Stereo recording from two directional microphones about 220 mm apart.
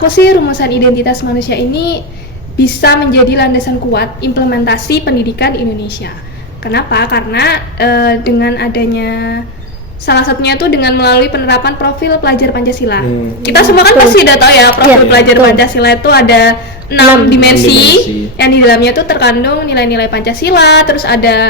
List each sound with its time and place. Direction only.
0.2 s a woman's voice: 50° left (ahead or behind)
6.7 s a woman's voice: 50° left (ahead or behind)